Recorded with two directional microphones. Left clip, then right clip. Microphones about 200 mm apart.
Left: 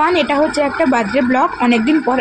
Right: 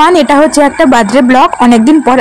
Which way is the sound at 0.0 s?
55° right (ahead or behind).